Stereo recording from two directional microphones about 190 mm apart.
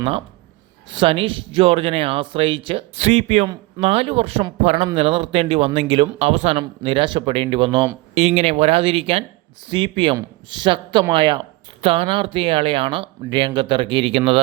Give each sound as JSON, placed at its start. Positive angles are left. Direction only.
{"t": 0.9, "sound": "speech", "side_deg": -25}